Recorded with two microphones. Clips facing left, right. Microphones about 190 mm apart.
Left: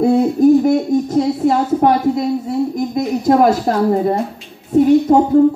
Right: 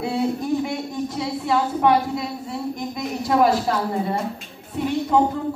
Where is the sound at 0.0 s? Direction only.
45° left (ahead or behind).